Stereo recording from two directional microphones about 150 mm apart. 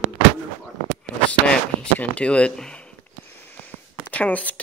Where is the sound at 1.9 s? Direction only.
10° left (ahead or behind).